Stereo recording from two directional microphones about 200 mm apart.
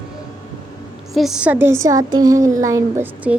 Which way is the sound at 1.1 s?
Centre (ahead or behind).